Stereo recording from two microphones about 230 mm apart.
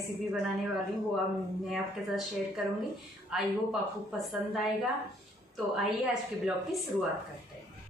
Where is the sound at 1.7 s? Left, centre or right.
Centre.